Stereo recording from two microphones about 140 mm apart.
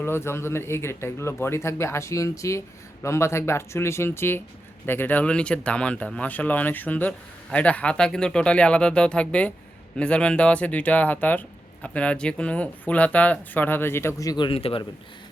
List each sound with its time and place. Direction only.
0.0 s speech: 15° left (ahead or behind); by 14.8 s 40° left (ahead or behind)